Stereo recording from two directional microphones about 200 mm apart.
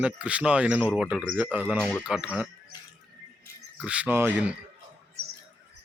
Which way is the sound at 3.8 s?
5° right (ahead or behind).